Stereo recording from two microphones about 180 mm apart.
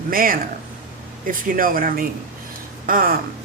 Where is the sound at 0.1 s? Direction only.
55° right (ahead or behind).